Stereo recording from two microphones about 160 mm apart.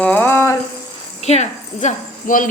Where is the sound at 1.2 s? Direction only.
45° left (ahead or behind).